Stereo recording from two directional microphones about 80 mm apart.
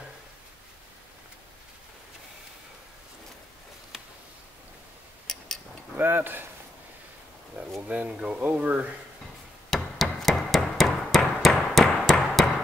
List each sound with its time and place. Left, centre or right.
5.2 s a sound: centre
5.9 s speech: right
7.8 s speech: centre
9.7 s hammer: centre